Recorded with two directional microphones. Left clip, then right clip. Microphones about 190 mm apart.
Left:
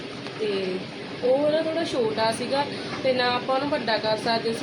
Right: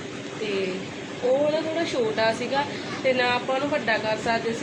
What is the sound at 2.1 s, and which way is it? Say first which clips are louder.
A woman's voice: right 1 dB; 10° left (ahead or behind).